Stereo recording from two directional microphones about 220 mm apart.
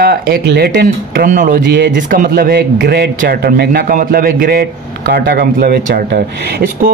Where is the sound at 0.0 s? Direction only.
45° right (ahead or behind).